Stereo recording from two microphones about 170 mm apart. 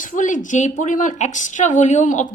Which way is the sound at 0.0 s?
50° left (ahead or behind).